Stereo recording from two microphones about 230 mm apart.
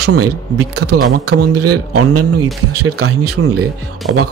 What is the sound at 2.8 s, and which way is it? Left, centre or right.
Speech, right.